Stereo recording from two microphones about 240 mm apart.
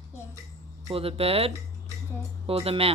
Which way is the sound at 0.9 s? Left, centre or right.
Right.